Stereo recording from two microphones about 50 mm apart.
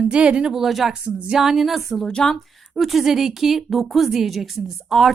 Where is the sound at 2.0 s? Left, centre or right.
Centre.